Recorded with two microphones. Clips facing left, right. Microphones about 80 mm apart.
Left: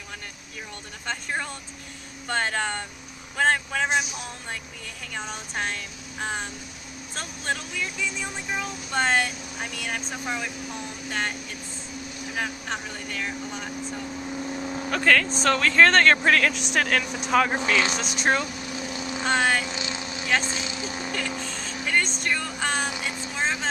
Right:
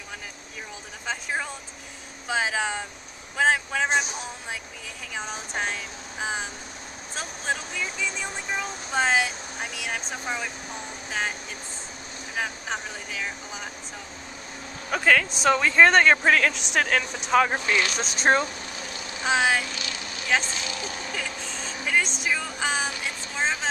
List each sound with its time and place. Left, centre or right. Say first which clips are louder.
1.0 s speech: even; centre
5.1 s speech: right 1 dB; centre
12.4 s speech: right 1 dB; centre
14.9 s speech: even; centre
17.9 s speech: right 2 dB; right
19.2 s speech: even; centre
19.6 s vehicle: left 3 dB; left
21.4 s vehicle: left 1 dB; centre
22.2 s speech: even; centre
23.0 s vehicle: even; centre